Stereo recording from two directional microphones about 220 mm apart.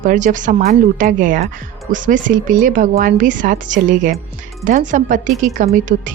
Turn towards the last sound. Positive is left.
turn(degrees=-35)  # may be behind; listen again after turning